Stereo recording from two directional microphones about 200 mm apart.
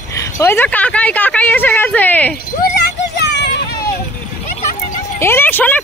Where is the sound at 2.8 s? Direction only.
60° left (ahead or behind).